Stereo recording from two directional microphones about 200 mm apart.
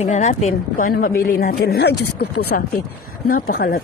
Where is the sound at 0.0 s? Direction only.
35° left (ahead or behind); by 3.8 s 50° left (ahead or behind).